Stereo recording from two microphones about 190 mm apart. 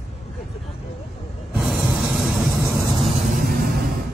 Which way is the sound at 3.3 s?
50° right (ahead or behind).